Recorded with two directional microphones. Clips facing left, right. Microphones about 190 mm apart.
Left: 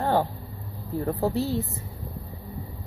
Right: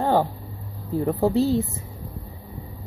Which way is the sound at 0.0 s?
15° right (ahead or behind).